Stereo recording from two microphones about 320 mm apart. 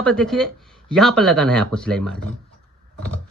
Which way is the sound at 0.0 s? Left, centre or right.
Centre.